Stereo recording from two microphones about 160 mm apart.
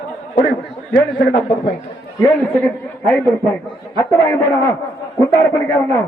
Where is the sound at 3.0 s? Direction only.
15° left (ahead or behind).